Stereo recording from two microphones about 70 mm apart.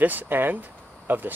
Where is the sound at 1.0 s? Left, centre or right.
Right.